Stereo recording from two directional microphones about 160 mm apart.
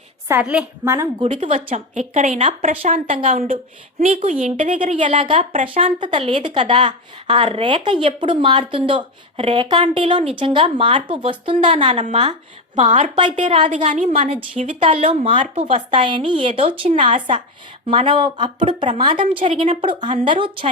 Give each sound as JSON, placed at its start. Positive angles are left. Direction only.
{"t": 0.3, "sound": "a woman's voice", "side_deg": -10}
{"t": 1.2, "sound": "a woman's voice", "side_deg": -35}
{"t": 1.5, "sound": "a woman's voice", "side_deg": -45}
{"t": 12.7, "sound": "a woman's voice", "side_deg": -45}
{"t": 13.1, "sound": "speech", "side_deg": -30}
{"t": 13.7, "sound": "a woman's voice", "side_deg": -50}
{"t": 14.8, "sound": "a woman's voice", "side_deg": -35}